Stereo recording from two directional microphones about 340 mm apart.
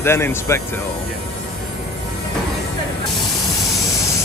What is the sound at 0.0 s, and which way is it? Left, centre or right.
Speech, centre.